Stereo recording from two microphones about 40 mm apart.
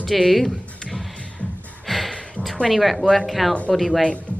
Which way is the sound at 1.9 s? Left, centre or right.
Centre.